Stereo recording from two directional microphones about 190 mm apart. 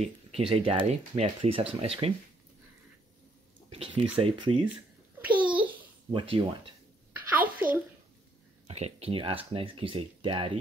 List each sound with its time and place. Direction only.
0.0 s speech: 30° right (ahead or behind)
3.7 s speech: 30° right (ahead or behind)
5.3 s babbling: 25° right (ahead or behind)
6.1 s speech: 25° right (ahead or behind)
7.2 s a sound: 10° right (ahead or behind)
8.6 s speech: 35° right (ahead or behind)